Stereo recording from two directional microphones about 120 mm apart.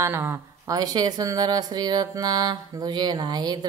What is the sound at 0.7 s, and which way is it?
A woman's voice, 35° right (ahead or behind).